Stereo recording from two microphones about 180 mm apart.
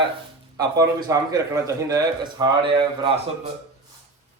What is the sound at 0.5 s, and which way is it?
A man's voice, 20° right (ahead or behind).